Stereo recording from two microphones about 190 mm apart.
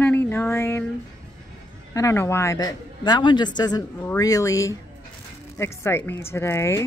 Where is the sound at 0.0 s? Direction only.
10° left (ahead or behind).